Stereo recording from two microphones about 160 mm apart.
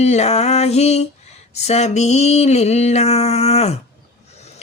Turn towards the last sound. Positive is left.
turn(degrees=40)  # may be behind; listen again after turning